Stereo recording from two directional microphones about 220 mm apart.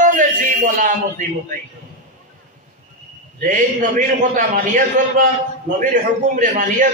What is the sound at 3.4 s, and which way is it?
A man's voice, 35° right (ahead or behind).